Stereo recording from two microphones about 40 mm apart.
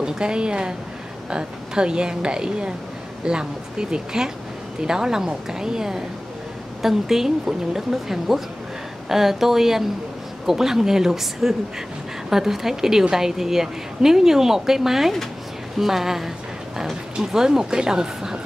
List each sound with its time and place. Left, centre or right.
0.0 s a woman's voice: centre